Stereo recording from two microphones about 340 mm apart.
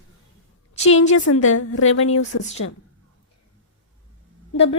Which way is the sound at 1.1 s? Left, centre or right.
Left.